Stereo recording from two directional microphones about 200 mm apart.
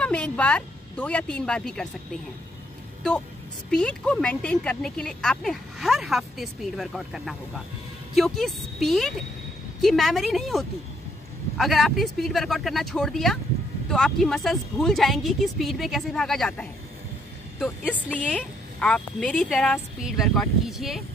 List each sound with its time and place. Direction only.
0.0 s a woman's voice: 5° left (ahead or behind)
3.7 s speech: 5° left (ahead or behind)